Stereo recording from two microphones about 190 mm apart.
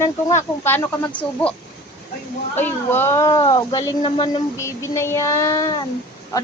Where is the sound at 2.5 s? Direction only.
10° left (ahead or behind).